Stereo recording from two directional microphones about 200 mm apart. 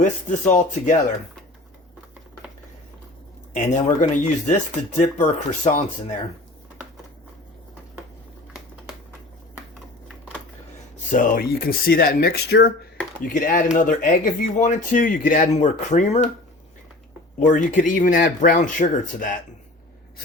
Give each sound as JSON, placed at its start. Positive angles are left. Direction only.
{"t": 0.0, "sound": "speech", "side_deg": 40}
{"t": 3.5, "sound": "speech", "side_deg": 35}
{"t": 10.9, "sound": "speech", "side_deg": 40}
{"t": 13.2, "sound": "speech", "side_deg": 40}
{"t": 17.4, "sound": "speech", "side_deg": 40}